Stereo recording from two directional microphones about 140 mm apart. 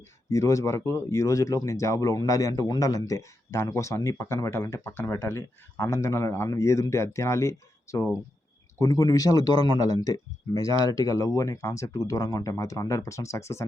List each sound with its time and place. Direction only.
0.3 s speech: 20° left (ahead or behind)